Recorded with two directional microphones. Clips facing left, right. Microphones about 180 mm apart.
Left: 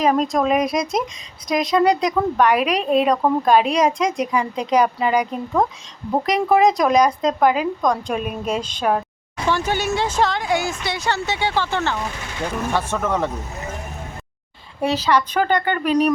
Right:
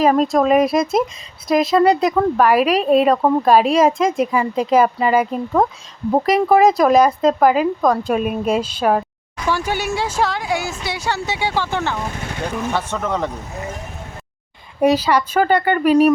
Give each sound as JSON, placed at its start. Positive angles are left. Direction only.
{"t": 0.0, "sound": "speech", "side_deg": 0}
{"t": 12.7, "sound": "speech", "side_deg": 10}
{"t": 14.8, "sound": "speech", "side_deg": -10}